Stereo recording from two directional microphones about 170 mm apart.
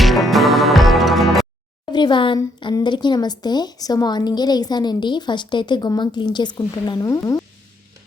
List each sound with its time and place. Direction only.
0.0 s music: centre (ahead or behind)
1.9 s speech: 25° left (ahead or behind)